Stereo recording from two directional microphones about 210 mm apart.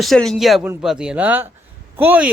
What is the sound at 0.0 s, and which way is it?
Speech, centre (ahead or behind).